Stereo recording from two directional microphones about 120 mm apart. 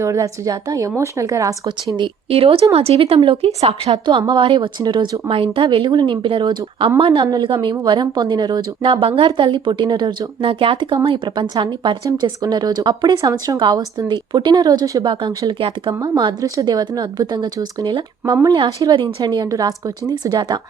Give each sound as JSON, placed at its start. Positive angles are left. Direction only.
{"t": 0.0, "sound": "a woman's voice", "side_deg": -25}
{"t": 2.0, "sound": "a woman's voice", "side_deg": -50}
{"t": 3.9, "sound": "a woman's voice", "side_deg": -35}